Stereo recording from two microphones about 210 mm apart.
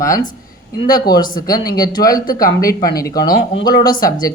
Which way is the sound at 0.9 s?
20° left (ahead or behind).